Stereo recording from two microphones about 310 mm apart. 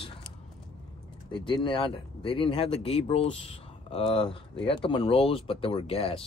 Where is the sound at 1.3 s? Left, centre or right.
Centre.